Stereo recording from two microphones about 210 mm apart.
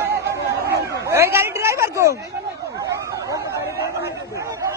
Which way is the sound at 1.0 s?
10° right (ahead or behind).